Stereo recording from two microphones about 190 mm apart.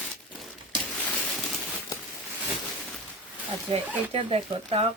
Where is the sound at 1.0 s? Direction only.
Centre (ahead or behind).